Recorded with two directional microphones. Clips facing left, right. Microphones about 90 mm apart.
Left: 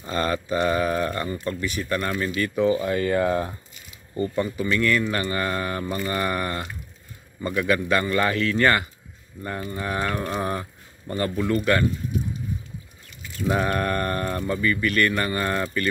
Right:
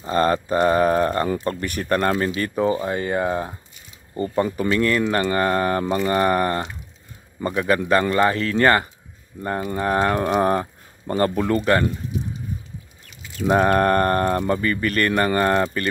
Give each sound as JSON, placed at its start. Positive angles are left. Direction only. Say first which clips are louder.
{"t": 0.0, "sound": "speech", "louder": "right 6 dB", "side_deg": -35}
{"t": 1.4, "sound": "a sound", "louder": "right 2 dB", "side_deg": -50}
{"t": 2.1, "sound": "speech", "louder": "right 2 dB", "side_deg": -35}
{"t": 4.6, "sound": "speech", "louder": "right 1 dB", "side_deg": -35}
{"t": 13.5, "sound": "a sound", "louder": "right 7 dB", "side_deg": -45}
{"t": 14.5, "sound": "speech", "louder": "right 2 dB", "side_deg": -40}